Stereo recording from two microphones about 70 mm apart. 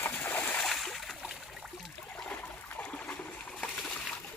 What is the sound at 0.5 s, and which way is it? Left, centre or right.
Splash, centre.